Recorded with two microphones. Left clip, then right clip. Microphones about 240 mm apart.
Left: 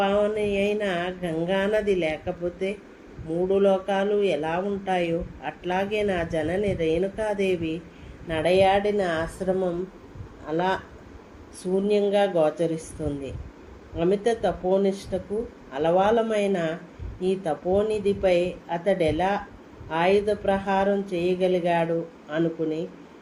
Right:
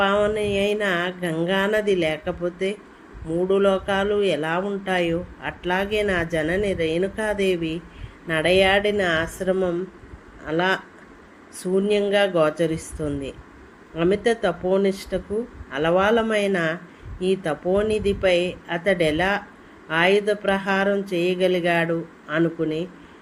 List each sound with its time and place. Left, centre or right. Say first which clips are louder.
0.0 s mantra: right 3 dB; right
3.5 s speech: right 2 dB; right
13.9 s speech: right 3 dB; right